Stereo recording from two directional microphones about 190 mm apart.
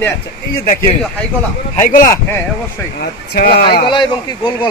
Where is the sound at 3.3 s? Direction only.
55° left (ahead or behind).